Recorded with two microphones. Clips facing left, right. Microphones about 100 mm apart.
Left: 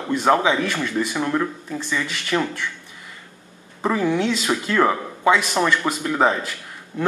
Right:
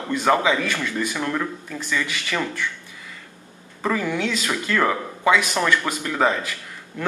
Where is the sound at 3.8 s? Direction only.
20° left (ahead or behind).